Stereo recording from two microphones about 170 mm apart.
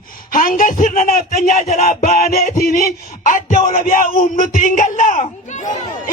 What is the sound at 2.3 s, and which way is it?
A man's voice, 50° left (ahead or behind).